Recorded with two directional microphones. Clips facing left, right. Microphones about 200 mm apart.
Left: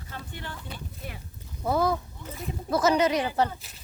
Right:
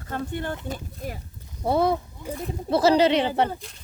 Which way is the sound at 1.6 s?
30° right (ahead or behind).